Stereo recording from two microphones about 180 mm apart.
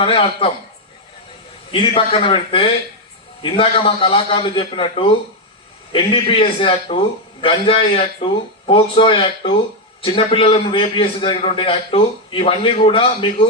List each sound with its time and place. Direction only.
0.0 s a man's voice: 30° left (ahead or behind)
1.7 s a man's voice: 30° left (ahead or behind)